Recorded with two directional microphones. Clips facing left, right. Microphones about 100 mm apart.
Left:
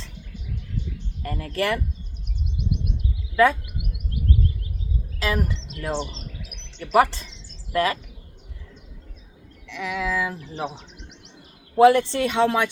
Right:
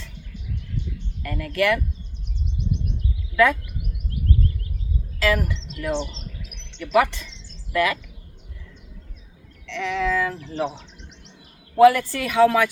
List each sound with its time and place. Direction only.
1.2 s speech: 35° left (ahead or behind)
3.3 s speech: 30° left (ahead or behind)
5.2 s speech: 25° left (ahead or behind)
6.0 s bird: 5° left (ahead or behind)
6.9 s speech: 35° left (ahead or behind)
9.6 s a sound: 10° left (ahead or behind)
11.8 s speech: 25° left (ahead or behind)